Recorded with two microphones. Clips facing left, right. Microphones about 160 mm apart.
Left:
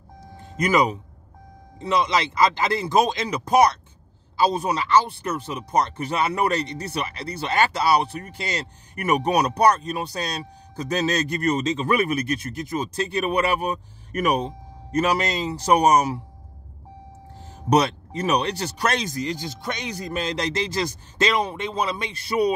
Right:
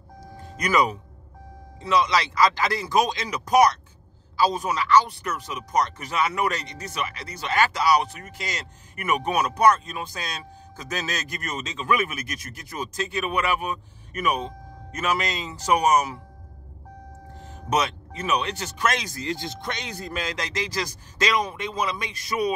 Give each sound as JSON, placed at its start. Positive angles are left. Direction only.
{"t": 0.6, "sound": "speech", "side_deg": 20}
{"t": 17.4, "sound": "speech", "side_deg": 35}
{"t": 19.6, "sound": "speech", "side_deg": 15}
{"t": 20.2, "sound": "speech", "side_deg": 30}